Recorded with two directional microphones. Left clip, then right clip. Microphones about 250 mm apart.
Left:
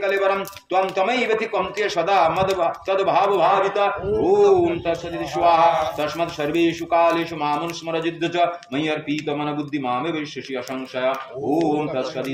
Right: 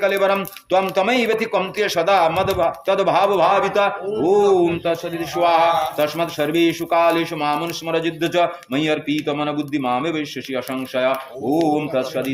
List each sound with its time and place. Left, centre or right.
0.0 s speech: right